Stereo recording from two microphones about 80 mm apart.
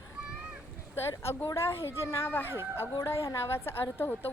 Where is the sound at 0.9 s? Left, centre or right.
Left.